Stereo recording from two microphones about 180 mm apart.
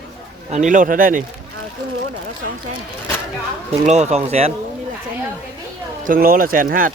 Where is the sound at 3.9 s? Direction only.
40° right (ahead or behind).